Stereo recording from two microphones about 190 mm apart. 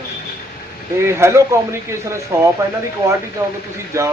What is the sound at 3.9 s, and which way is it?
Speech, 15° right (ahead or behind).